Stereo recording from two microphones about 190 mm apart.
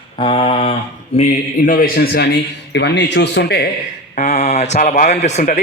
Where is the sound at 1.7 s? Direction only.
50° left (ahead or behind).